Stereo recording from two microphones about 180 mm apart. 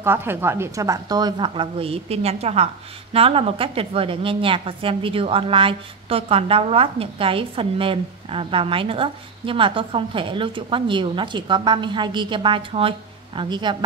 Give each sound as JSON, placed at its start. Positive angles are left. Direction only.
{"t": 0.0, "sound": "a woman's voice", "side_deg": -10}